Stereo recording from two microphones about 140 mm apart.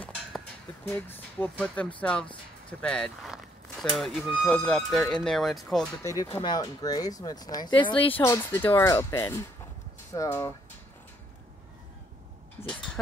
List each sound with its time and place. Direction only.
0.8 s speech: 15° left (ahead or behind)
6.4 s speech: 30° left (ahead or behind)
8.2 s speech: 20° left (ahead or behind)
12.6 s a sound: 20° left (ahead or behind)